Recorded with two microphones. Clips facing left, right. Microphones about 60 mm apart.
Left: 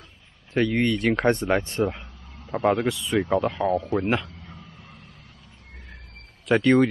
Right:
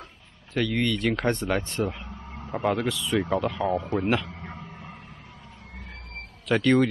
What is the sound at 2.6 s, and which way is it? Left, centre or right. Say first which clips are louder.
Speech: left 4 dB; left.